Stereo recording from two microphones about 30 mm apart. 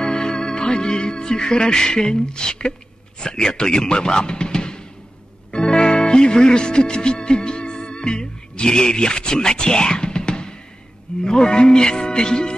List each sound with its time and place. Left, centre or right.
0.0 s speech: left
5.5 s music: left
11.2 s speech: left